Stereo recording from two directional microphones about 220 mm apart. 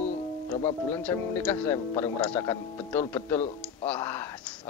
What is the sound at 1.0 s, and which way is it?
A man's voice, 5° left (ahead or behind).